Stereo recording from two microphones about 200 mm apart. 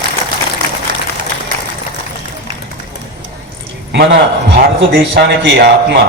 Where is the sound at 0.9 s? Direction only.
45° right (ahead or behind).